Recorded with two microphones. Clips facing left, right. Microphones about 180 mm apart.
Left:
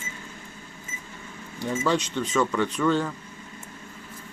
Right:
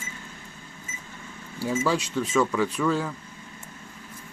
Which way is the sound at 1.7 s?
5° right (ahead or behind).